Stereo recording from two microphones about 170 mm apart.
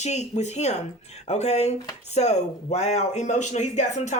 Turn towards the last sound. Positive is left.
turn(degrees=45)  # may be behind; listen again after turning